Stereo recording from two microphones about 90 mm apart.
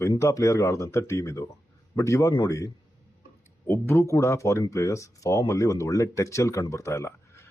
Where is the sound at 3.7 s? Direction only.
30° left (ahead or behind).